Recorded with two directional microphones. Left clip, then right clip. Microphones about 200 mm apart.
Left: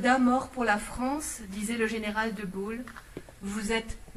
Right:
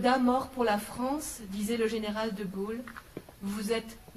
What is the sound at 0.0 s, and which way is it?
Speech, 60° right (ahead or behind).